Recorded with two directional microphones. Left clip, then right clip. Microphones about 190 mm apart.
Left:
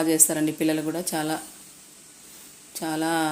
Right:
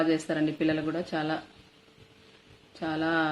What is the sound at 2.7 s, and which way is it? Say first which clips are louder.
Speech: left 2 dB; 20° left (ahead or behind).